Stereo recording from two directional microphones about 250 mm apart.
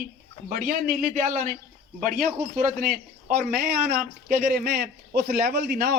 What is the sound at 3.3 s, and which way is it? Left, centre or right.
Speech, right.